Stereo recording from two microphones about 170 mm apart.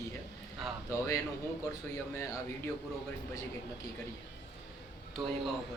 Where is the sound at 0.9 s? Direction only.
15° left (ahead or behind).